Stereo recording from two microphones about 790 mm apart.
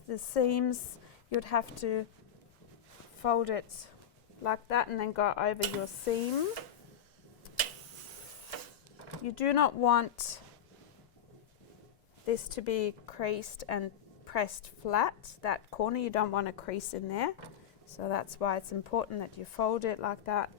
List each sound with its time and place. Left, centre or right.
0.1 s speech: left
3.2 s speech: left
4.4 s a woman's voice: left
9.2 s speech: left
12.2 s a woman's voice: left